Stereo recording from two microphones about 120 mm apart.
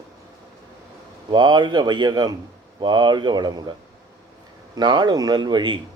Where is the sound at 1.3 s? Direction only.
35° right (ahead or behind).